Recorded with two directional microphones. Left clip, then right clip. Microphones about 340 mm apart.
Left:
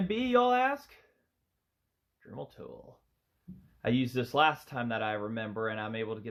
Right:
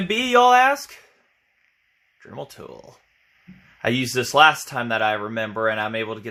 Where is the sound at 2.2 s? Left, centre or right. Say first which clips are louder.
Right 9 dB; right.